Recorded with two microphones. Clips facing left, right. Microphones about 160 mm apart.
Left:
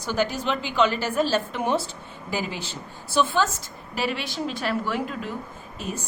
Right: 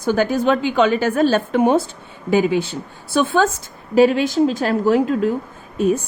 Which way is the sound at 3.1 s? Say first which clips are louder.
Right 6 dB; 55° right (ahead or behind).